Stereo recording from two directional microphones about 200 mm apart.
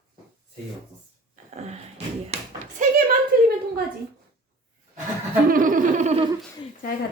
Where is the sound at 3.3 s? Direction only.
50° right (ahead or behind).